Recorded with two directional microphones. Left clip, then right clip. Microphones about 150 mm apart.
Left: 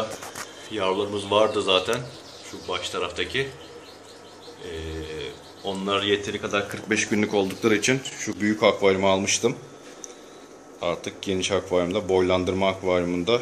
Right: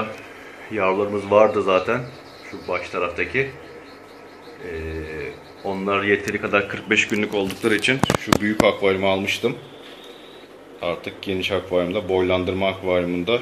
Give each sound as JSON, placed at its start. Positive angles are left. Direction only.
{"t": 0.7, "sound": "speech", "side_deg": 5}
{"t": 5.7, "sound": "speech", "side_deg": 5}
{"t": 7.1, "sound": "speech", "side_deg": 30}
{"t": 8.4, "sound": "speech", "side_deg": 25}
{"t": 10.8, "sound": "speech", "side_deg": 20}